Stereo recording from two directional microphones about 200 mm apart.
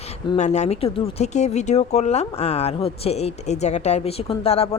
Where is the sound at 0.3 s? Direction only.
35° left (ahead or behind).